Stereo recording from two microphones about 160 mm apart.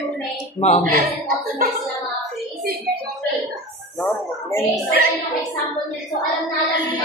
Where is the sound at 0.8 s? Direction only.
60° right (ahead or behind).